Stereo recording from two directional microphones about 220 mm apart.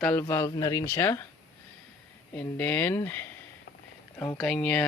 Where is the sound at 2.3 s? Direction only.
5° left (ahead or behind).